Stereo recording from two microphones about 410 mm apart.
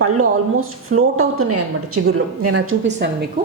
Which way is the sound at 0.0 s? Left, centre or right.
Right.